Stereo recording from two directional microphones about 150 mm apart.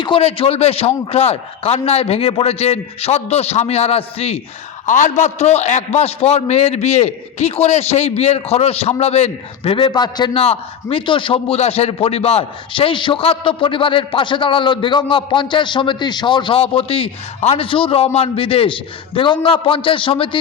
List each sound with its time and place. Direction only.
0.0 s a man's voice: 40° left (ahead or behind)
4.9 s a man's voice: 55° left (ahead or behind)
9.6 s a man's voice: 35° left (ahead or behind)